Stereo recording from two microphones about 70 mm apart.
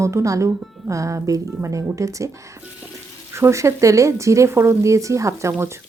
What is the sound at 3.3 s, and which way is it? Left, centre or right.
Speech, right.